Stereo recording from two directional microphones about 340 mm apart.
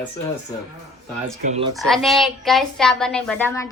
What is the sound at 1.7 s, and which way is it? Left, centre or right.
A woman's voice, centre.